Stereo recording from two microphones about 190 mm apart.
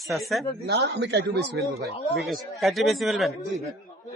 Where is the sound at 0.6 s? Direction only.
65° right (ahead or behind).